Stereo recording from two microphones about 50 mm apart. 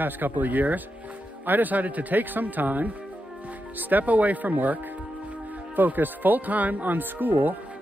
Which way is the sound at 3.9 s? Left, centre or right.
Right.